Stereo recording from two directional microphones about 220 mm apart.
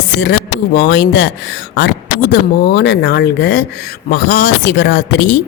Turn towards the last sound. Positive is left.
turn(degrees=50)  # may be behind; listen again after turning